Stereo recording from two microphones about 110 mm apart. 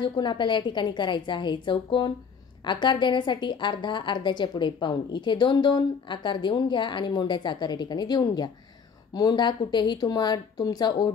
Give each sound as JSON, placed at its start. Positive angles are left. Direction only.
{"t": 0.0, "sound": "a woman's voice", "side_deg": 45}